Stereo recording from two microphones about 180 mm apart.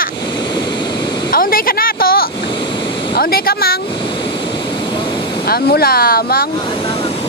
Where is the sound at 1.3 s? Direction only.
55° left (ahead or behind).